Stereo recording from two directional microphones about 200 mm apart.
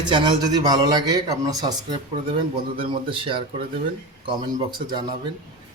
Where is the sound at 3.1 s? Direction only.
25° right (ahead or behind).